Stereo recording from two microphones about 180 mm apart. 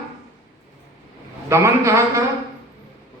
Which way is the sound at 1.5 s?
15° right (ahead or behind).